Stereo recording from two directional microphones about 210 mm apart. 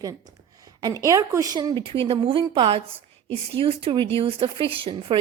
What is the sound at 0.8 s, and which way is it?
Speech, 15° right (ahead or behind).